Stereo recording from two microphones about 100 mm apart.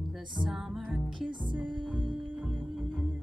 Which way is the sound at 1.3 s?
50° right (ahead or behind).